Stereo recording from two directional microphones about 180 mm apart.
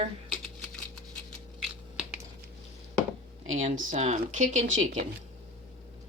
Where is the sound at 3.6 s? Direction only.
40° right (ahead or behind).